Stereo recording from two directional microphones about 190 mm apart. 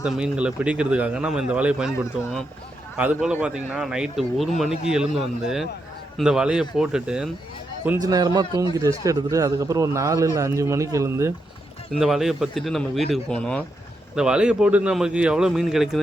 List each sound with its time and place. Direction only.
0.0 s speech: 5° right (ahead or behind)
3.0 s a man's voice: 5° right (ahead or behind)
8.0 s a man's voice: 20° right (ahead or behind)
11.9 s speech: centre (ahead or behind)